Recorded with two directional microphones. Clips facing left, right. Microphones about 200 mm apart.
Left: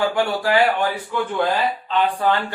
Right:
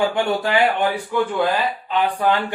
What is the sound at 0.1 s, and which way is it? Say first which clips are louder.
Speech: even; 20° right (ahead or behind).